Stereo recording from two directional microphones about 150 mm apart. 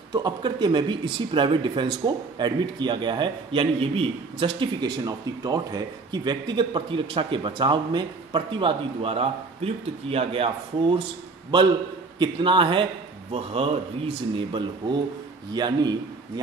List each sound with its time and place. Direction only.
0.1 s speech: 30° right (ahead or behind)
12.2 s a man's voice: 35° right (ahead or behind)